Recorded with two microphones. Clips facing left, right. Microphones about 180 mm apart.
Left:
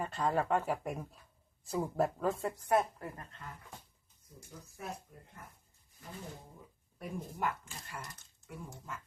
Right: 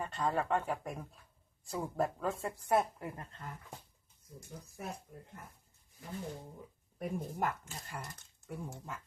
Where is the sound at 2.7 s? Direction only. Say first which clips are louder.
Even; 10° right (ahead or behind).